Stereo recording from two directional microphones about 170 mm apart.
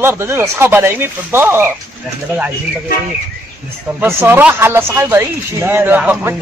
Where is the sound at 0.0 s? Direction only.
15° right (ahead or behind).